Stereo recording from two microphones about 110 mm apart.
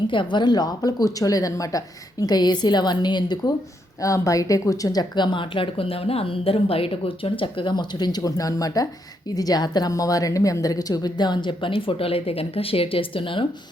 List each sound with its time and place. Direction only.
0.1 s a woman's voice: 45° left (ahead or behind)
4.0 s a woman's voice: 30° left (ahead or behind); by 13.4 s 50° left (ahead or behind)